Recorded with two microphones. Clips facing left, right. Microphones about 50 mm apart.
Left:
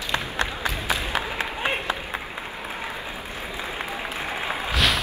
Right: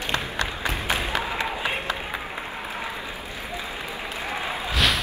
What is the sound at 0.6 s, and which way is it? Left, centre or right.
Crowd, right.